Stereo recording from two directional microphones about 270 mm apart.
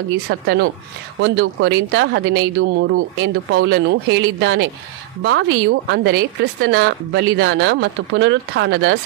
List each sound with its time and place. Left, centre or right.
0.3 s a woman's voice: right